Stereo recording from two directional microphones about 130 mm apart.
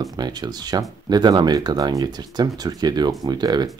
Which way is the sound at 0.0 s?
30° right (ahead or behind).